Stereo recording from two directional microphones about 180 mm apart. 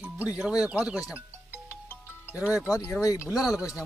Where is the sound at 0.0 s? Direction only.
5° right (ahead or behind).